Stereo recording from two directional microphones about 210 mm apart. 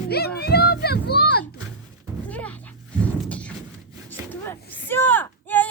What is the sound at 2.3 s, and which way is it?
Music, 5° left (ahead or behind).